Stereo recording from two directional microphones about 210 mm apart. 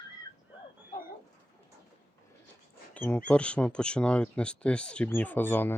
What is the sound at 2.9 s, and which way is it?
Speech, 5° left (ahead or behind).